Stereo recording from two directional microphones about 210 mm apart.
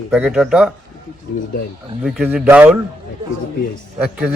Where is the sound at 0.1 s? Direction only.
Centre (ahead or behind).